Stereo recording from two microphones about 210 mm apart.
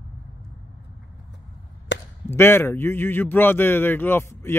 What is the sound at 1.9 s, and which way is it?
Chop, 60° left (ahead or behind).